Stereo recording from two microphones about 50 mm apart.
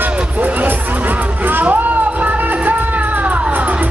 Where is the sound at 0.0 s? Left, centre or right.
Right.